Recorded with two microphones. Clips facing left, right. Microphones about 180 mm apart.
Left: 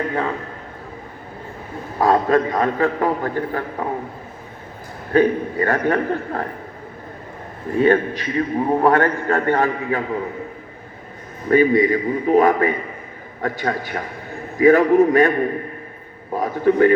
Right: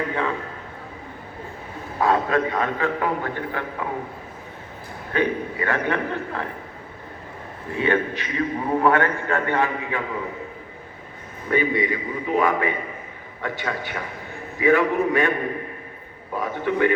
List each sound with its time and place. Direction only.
2.0 s a man's voice: 40° left (ahead or behind)
5.1 s a man's voice: 40° left (ahead or behind)
7.8 s a man's voice: 40° left (ahead or behind)
11.4 s a man's voice: 40° left (ahead or behind)
16.3 s a sound: 40° left (ahead or behind)